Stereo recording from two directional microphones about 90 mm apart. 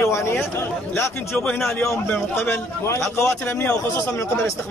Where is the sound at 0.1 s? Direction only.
30° left (ahead or behind).